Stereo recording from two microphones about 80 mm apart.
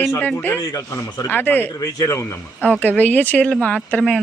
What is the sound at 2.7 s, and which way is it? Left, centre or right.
A woman's voice, left.